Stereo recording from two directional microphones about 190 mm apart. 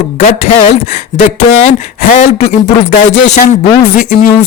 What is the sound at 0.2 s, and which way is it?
Speech, 35° left (ahead or behind).